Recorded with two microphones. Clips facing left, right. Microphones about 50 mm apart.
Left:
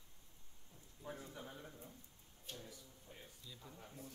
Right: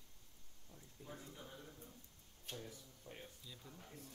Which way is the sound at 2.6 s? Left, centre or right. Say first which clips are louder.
Right 2 dB; right.